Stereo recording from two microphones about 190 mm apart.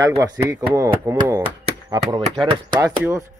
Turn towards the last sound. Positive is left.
turn(degrees=-15)  # may be behind; listen again after turning